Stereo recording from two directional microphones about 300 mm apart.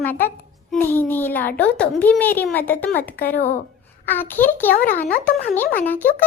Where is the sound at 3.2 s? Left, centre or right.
Left.